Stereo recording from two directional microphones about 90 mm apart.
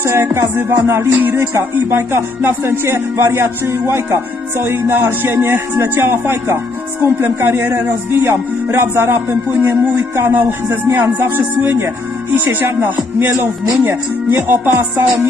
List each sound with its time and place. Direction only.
0.0 s music: 30° right (ahead or behind)